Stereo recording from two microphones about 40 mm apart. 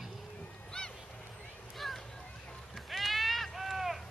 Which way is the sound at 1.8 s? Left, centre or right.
Centre.